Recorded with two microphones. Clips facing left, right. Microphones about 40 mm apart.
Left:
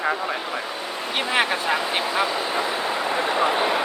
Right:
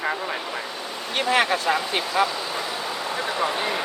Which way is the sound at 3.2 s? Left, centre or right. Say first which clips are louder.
Left 3 dB; left.